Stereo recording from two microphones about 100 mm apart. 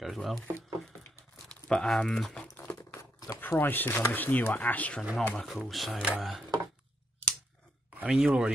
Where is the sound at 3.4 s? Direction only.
20° left (ahead or behind).